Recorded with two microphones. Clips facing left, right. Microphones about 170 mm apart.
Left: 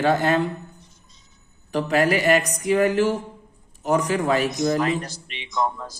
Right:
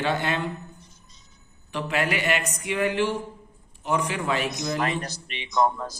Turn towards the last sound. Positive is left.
turn(degrees=-40)  # may be behind; listen again after turning